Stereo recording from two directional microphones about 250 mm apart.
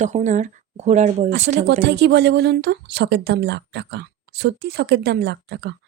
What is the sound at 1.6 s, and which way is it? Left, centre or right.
Speech, right.